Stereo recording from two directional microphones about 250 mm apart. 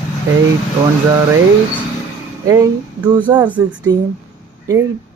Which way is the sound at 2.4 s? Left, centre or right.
Centre.